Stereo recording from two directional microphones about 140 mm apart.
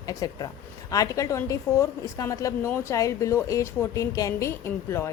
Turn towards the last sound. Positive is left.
turn(degrees=20)  # may be behind; listen again after turning